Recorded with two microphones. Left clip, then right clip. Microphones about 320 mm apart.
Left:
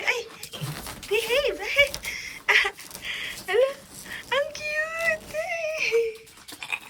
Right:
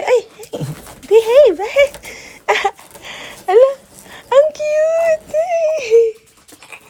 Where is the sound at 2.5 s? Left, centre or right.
Centre.